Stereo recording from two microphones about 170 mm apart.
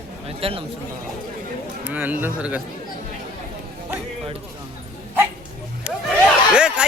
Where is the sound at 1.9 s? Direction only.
10° right (ahead or behind).